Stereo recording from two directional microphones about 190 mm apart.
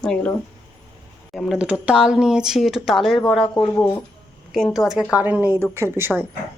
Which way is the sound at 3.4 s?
20° left (ahead or behind).